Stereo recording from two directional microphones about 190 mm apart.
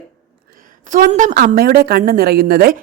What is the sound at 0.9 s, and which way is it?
A woman's voice, 45° right (ahead or behind).